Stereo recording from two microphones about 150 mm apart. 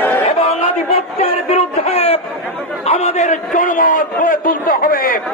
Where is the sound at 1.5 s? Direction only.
45° left (ahead or behind).